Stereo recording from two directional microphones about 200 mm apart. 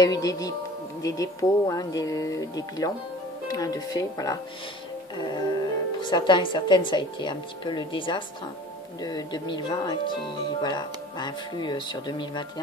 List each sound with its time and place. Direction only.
0.0 s speech: 20° left (ahead or behind)